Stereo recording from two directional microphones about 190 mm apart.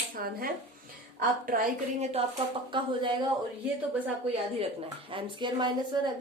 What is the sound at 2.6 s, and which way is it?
Speech, 25° right (ahead or behind).